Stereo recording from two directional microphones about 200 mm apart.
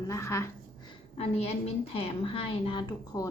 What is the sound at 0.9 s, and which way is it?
A woman's voice, 30° left (ahead or behind).